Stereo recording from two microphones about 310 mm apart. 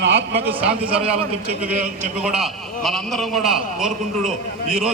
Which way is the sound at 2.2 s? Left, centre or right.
Centre.